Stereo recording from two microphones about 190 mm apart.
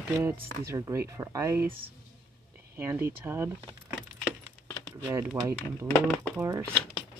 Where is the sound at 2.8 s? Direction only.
10° right (ahead or behind).